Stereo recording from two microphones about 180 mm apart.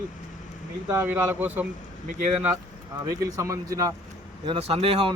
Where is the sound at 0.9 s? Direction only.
15° right (ahead or behind).